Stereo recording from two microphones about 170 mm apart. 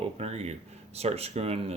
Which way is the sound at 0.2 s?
35° right (ahead or behind).